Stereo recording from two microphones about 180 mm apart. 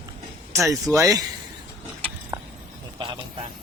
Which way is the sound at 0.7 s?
15° right (ahead or behind).